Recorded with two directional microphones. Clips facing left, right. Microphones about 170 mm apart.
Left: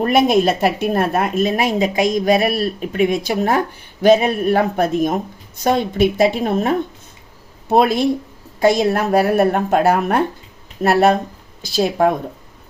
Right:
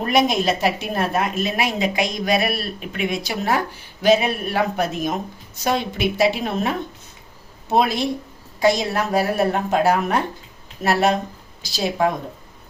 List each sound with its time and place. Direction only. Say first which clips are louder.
0.0 s a woman's voice: left 5 dB; 50° left (ahead or behind)